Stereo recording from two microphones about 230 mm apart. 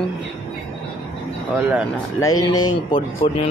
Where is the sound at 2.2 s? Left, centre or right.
Centre.